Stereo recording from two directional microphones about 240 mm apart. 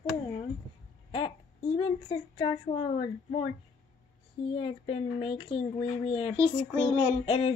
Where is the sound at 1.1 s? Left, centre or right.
Left.